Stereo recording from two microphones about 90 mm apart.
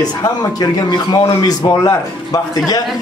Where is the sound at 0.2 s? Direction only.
45° left (ahead or behind).